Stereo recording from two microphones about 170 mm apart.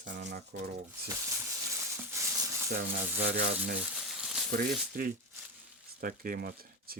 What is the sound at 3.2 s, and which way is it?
Speech, 50° right (ahead or behind).